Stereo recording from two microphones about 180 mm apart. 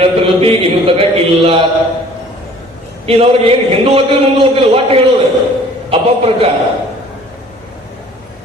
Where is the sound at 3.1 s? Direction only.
30° right (ahead or behind).